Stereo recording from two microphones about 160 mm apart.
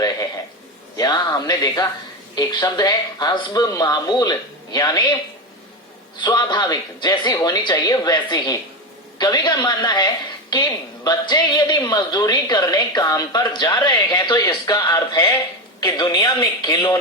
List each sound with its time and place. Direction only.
0.9 s a woman's voice: 25° left (ahead or behind)
6.2 s a woman's voice: 25° left (ahead or behind)